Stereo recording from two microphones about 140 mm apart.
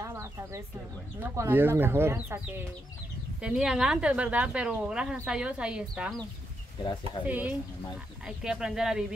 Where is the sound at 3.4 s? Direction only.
5° right (ahead or behind).